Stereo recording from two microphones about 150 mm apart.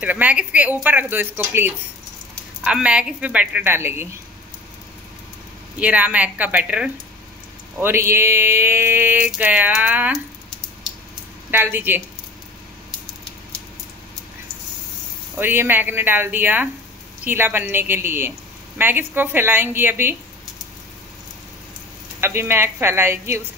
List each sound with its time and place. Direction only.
0.0 s mantra: 10° right (ahead or behind)
5.8 s mantra: 10° right (ahead or behind)
11.5 s mantra: 15° right (ahead or behind)
15.3 s mantra: 15° right (ahead or behind)
22.2 s mantra: 15° right (ahead or behind)